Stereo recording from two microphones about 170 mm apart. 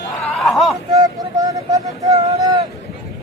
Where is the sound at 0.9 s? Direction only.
20° right (ahead or behind).